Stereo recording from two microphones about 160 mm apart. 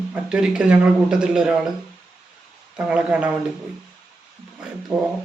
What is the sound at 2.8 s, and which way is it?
Speech, 10° right (ahead or behind).